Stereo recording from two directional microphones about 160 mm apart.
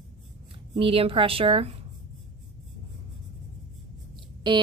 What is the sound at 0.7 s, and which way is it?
A woman's voice, 35° right (ahead or behind).